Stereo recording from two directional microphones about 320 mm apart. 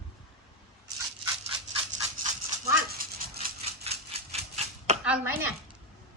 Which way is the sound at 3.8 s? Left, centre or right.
Centre.